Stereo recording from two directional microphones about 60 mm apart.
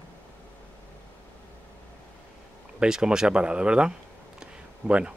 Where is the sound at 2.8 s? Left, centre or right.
Centre.